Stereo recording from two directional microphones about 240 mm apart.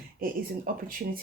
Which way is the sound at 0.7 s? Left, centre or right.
Right.